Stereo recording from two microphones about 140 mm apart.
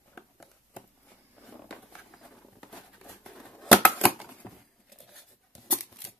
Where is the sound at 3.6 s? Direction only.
5° left (ahead or behind).